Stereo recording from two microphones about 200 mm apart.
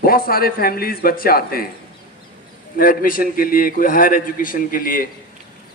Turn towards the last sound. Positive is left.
turn(degrees=45)  # may be behind; listen again after turning